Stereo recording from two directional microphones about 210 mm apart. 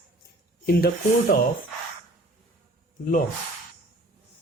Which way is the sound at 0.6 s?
45° left (ahead or behind).